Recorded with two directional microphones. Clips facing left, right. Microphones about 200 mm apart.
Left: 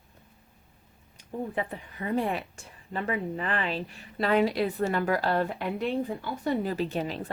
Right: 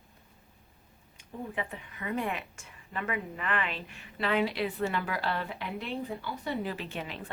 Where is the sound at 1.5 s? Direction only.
35° left (ahead or behind).